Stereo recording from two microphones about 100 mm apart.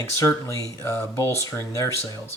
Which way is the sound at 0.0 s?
25° left (ahead or behind).